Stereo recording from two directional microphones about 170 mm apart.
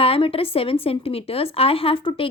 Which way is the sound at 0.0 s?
35° left (ahead or behind).